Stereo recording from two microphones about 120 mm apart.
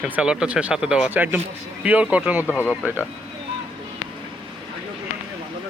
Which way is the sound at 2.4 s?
20° left (ahead or behind).